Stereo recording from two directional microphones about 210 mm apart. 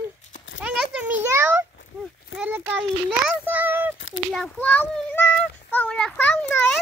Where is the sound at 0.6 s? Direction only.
5° right (ahead or behind).